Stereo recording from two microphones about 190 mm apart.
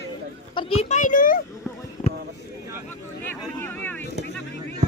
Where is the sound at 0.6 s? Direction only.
30° left (ahead or behind).